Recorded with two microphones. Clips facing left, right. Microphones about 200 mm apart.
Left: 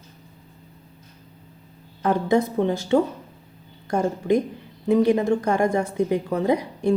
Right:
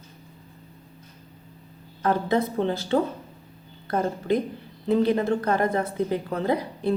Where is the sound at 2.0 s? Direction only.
15° left (ahead or behind).